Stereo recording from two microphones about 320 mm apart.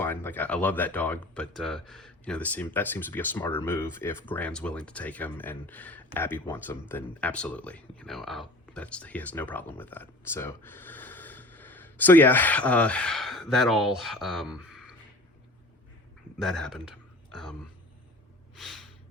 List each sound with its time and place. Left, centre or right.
0.0 s speech: centre
16.4 s speech: centre
18.5 s a sound: centre